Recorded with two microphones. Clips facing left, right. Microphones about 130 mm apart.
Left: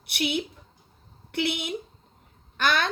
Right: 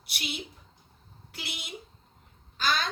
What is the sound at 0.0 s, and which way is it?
A woman's voice, 55° left (ahead or behind).